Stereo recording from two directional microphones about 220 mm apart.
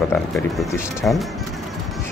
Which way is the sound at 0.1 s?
5° left (ahead or behind).